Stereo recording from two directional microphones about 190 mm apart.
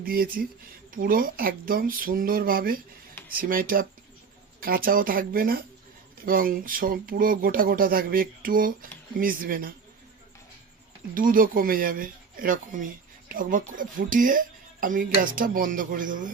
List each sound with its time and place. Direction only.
0.0 s speech: 50° right (ahead or behind)
4.9 s speech: 50° right (ahead or behind)
11.1 s speech: 45° right (ahead or behind)